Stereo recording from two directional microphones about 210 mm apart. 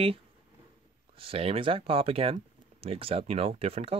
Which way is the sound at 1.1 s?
25° right (ahead or behind).